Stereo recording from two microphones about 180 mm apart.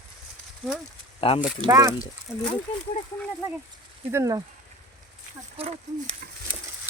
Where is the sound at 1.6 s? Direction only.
20° right (ahead or behind).